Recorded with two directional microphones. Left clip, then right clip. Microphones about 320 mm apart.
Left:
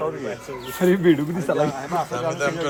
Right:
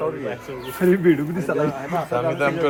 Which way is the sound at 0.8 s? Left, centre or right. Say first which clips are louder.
Even; left.